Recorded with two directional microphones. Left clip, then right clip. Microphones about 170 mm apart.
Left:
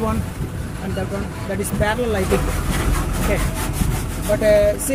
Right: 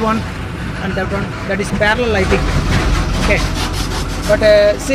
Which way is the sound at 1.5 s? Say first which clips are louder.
Right 7 dB; 20° left (ahead or behind).